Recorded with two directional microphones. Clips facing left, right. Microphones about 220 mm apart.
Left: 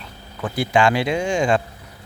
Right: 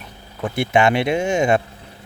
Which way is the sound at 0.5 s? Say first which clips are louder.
Right 1 dB; 25° right (ahead or behind).